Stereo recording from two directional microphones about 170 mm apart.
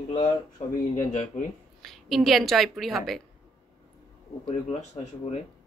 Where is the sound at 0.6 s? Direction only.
40° left (ahead or behind).